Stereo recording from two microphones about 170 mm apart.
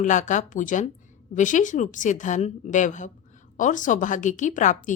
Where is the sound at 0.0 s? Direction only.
45° left (ahead or behind).